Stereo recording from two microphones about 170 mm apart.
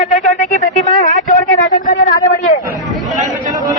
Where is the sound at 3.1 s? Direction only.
Centre (ahead or behind).